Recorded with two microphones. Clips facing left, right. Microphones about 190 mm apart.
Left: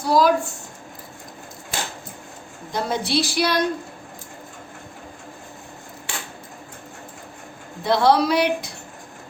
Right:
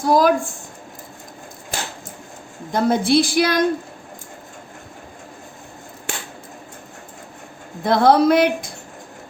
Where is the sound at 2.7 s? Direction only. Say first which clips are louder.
Right 7 dB; 55° right (ahead or behind).